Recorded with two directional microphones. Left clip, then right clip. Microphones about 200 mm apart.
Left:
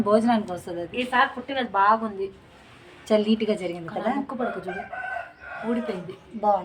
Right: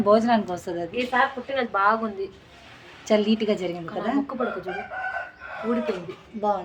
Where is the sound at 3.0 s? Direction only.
20° right (ahead or behind).